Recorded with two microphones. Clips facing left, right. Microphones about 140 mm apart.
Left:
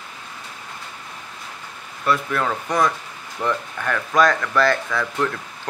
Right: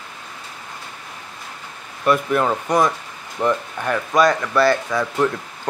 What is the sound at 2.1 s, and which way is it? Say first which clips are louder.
Speech: right 4 dB; 20° right (ahead or behind).